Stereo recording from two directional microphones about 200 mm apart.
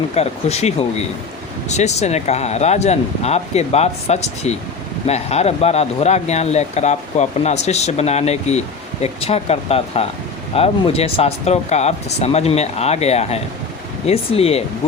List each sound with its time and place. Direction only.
0.2 s speech: 30° left (ahead or behind)